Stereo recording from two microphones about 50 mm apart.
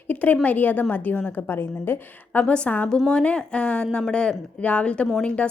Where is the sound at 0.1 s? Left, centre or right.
Left.